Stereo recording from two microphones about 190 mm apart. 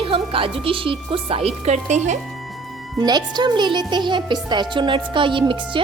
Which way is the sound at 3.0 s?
20° right (ahead or behind).